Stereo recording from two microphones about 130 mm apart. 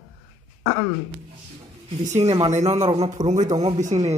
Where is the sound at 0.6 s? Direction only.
15° right (ahead or behind).